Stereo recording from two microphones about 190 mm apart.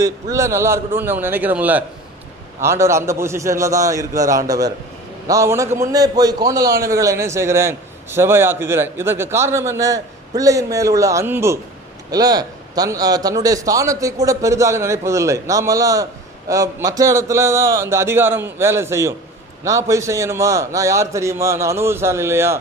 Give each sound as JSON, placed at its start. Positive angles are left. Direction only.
{"t": 0.0, "sound": "a man's voice", "side_deg": -15}